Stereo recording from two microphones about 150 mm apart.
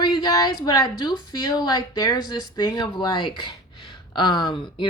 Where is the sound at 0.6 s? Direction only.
25° left (ahead or behind).